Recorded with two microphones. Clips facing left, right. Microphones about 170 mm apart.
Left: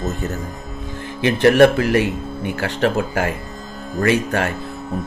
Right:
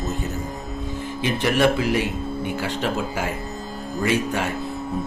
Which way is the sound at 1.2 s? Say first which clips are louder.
Left 8 dB; 65° left (ahead or behind).